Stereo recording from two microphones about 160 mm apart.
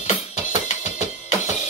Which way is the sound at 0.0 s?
45° left (ahead or behind).